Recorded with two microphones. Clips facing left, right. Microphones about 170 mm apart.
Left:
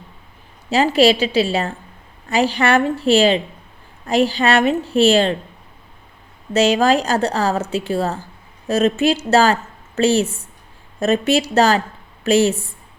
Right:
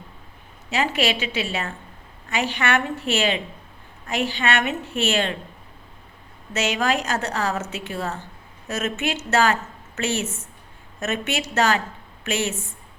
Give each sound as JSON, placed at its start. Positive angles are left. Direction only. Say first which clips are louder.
{"t": 0.9, "sound": "a woman's voice", "louder": "left 10 dB", "side_deg": 35}
{"t": 6.5, "sound": "a woman's voice", "louder": "left 8 dB", "side_deg": 35}